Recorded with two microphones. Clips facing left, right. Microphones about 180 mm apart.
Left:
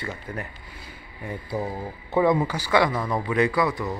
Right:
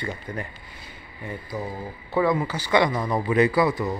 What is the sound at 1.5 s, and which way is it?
Speech, 30° left (ahead or behind).